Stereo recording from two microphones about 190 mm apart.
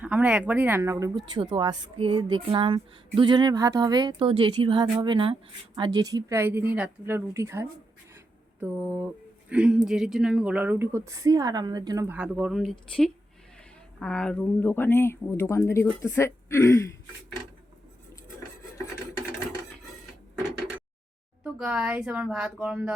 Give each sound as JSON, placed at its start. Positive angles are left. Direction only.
{"t": 0.0, "sound": "speech", "side_deg": -10}
{"t": 1.2, "sound": "a woman's voice", "side_deg": -25}
{"t": 12.1, "sound": "speech", "side_deg": -5}
{"t": 14.0, "sound": "speech", "side_deg": 5}
{"t": 21.4, "sound": "speech", "side_deg": -5}